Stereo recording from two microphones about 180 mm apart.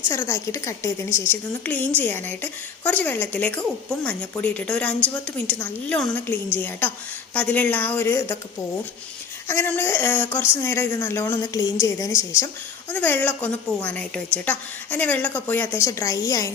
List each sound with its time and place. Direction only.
0.1 s a woman's voice: 15° left (ahead or behind)
9.5 s a woman's voice: 10° left (ahead or behind)